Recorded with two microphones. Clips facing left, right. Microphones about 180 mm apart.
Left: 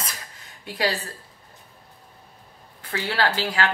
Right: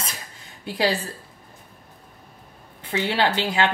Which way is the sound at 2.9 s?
20° right (ahead or behind).